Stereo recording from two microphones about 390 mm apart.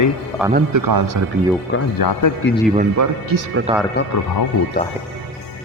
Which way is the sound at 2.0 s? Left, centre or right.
Left.